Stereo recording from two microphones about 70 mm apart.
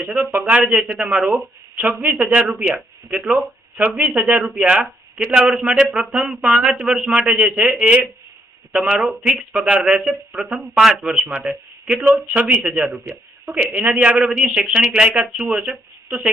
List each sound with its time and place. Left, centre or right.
0.0 s speech: centre
4.5 s speech: centre